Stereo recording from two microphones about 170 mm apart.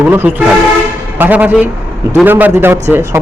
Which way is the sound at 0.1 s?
10° right (ahead or behind).